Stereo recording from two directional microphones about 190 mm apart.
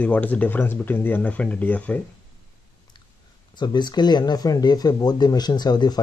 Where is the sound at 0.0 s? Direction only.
10° left (ahead or behind).